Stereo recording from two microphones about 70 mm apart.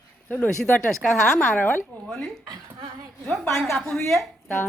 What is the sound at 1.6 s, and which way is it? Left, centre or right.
Speech, left.